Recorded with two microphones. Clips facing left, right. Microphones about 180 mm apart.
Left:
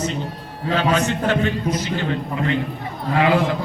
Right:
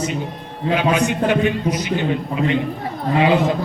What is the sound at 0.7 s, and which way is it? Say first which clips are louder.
A man's voice: right 2 dB; 15° right (ahead or behind).